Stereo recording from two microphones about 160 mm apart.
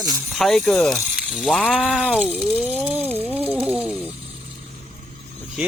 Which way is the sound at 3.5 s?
5° right (ahead or behind).